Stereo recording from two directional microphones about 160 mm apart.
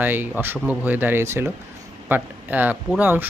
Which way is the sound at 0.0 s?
10° right (ahead or behind).